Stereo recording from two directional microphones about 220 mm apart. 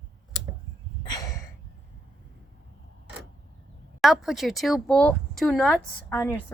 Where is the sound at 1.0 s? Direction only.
15° left (ahead or behind).